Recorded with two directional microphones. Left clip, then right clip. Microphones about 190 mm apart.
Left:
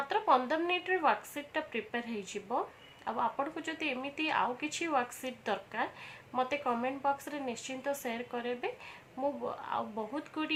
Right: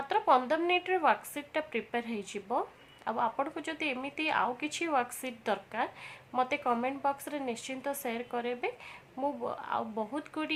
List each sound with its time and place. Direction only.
0.1 s a woman's voice: 30° right (ahead or behind)